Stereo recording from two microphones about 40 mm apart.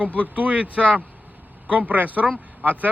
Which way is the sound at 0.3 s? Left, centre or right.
Right.